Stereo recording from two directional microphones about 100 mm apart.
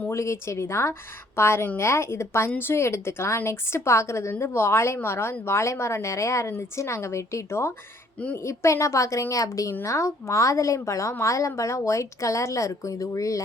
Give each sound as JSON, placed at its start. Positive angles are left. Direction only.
{"t": 0.1, "sound": "a woman's voice", "side_deg": 30}